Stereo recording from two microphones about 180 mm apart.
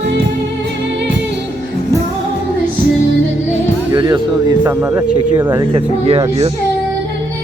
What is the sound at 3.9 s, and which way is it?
Speech, 25° right (ahead or behind).